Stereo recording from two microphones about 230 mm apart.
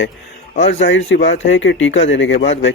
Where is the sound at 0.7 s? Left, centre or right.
Left.